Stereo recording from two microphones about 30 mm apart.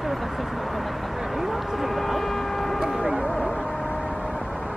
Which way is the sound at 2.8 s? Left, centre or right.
Centre.